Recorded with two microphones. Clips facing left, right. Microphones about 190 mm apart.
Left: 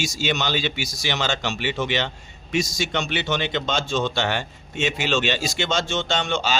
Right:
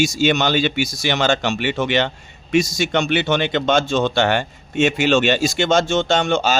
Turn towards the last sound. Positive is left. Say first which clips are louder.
# right 6 dB
turn(degrees=-45)  # may be behind; listen again after turning